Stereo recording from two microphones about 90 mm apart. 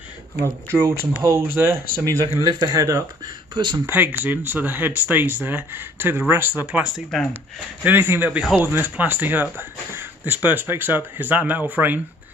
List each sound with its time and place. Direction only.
0.7 s speech: 30° right (ahead or behind)
2.4 s speech: 40° right (ahead or behind)
3.5 s speech: 50° right (ahead or behind)
3.8 s speech: 20° right (ahead or behind)